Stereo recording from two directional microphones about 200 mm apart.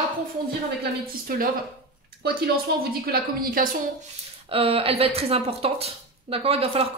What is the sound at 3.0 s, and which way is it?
Speech, 50° right (ahead or behind).